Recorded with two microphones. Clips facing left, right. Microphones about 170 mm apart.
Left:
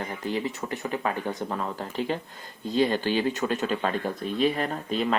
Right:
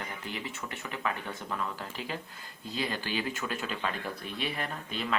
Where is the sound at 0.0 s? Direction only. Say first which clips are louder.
Left 9 dB; 35° left (ahead or behind).